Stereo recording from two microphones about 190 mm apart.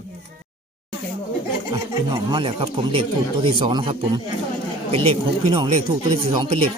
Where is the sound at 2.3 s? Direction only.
25° right (ahead or behind).